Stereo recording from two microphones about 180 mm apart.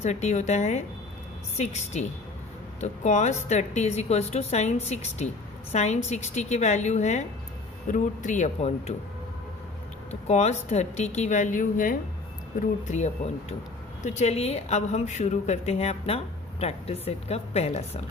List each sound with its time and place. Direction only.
0.0 s a woman's voice: 40° left (ahead or behind)
10.1 s a woman's voice: 40° left (ahead or behind)
14.0 s a woman's voice: 40° left (ahead or behind)